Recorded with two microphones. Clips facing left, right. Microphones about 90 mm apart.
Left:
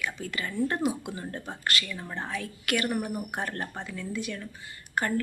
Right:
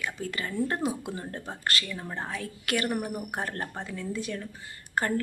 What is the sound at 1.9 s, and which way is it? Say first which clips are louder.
Speech: even; 15° right (ahead or behind).